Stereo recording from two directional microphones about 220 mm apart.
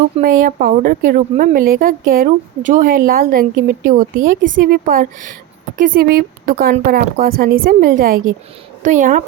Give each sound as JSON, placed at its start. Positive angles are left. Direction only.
{"t": 0.2, "sound": "a woman's voice", "side_deg": -40}